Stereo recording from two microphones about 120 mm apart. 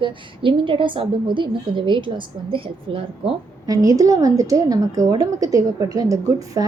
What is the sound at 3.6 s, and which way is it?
A woman's voice, 30° right (ahead or behind).